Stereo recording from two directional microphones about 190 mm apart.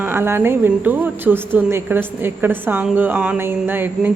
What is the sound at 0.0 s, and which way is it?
A woman's voice, 10° right (ahead or behind).